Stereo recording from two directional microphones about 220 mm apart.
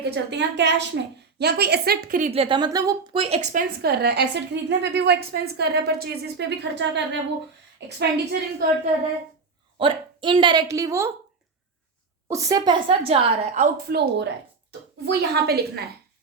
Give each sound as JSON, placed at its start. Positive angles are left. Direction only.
{"t": 0.0, "sound": "a woman's voice", "side_deg": -50}
{"t": 3.8, "sound": "a woman's voice", "side_deg": -45}
{"t": 9.7, "sound": "a woman's voice", "side_deg": -25}
{"t": 12.3, "sound": "a woman's voice", "side_deg": -15}